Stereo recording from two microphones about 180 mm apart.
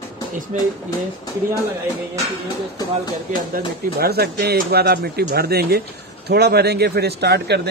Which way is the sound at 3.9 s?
60° right (ahead or behind).